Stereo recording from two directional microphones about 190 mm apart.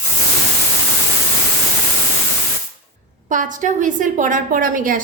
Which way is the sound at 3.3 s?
45° right (ahead or behind).